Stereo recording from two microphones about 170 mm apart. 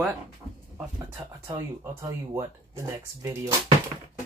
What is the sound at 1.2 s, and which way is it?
Speech, 25° right (ahead or behind).